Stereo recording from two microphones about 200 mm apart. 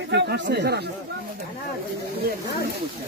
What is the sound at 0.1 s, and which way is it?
Speech, 60° right (ahead or behind).